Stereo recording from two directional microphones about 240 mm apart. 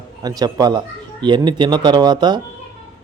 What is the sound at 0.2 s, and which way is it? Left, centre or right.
Speech, centre.